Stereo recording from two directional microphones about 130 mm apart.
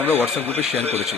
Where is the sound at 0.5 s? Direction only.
50° right (ahead or behind).